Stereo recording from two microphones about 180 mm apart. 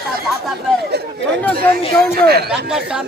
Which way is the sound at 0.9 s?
65° right (ahead or behind).